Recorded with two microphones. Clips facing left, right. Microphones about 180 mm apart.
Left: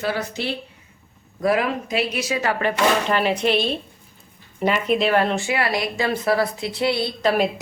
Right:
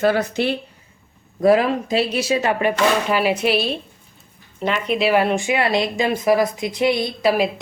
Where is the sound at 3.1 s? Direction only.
5° right (ahead or behind).